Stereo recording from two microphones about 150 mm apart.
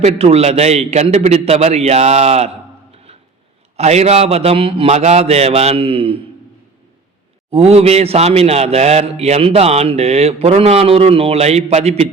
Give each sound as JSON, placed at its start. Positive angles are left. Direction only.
{"t": 0.0, "sound": "a man's voice", "side_deg": -45}
{"t": 2.9, "sound": "a sound", "side_deg": -40}
{"t": 3.8, "sound": "a man's voice", "side_deg": -45}
{"t": 7.5, "sound": "a man's voice", "side_deg": -45}